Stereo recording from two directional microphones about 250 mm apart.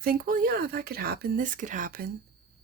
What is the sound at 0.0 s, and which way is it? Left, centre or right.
Speech, right.